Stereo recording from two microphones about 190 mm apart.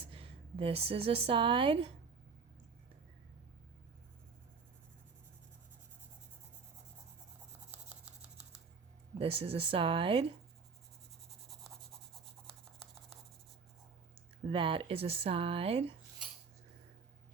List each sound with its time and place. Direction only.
0.1 s speech: 30° right (ahead or behind)
7.7 s a sound: 10° right (ahead or behind)
9.1 s speech: 30° right (ahead or behind)
12.2 s writing: centre (ahead or behind)
14.5 s speech: 30° right (ahead or behind)